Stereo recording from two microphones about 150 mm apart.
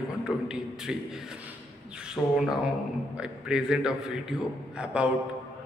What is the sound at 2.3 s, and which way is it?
A man's voice, 5° right (ahead or behind).